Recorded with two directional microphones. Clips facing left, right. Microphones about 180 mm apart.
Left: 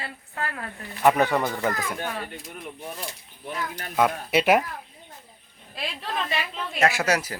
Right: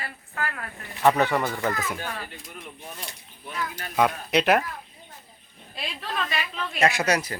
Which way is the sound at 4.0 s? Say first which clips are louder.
Even; 5° left (ahead or behind).